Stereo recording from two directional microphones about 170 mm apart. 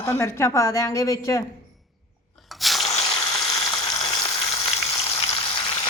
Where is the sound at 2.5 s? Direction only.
Centre (ahead or behind).